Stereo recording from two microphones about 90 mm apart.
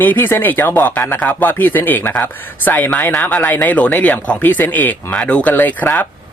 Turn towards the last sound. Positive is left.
turn(degrees=20)  # may be behind; listen again after turning